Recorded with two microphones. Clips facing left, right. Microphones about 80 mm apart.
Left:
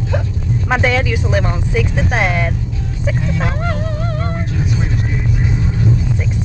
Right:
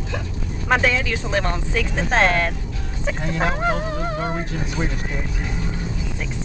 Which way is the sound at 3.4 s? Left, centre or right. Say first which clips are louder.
Even; centre.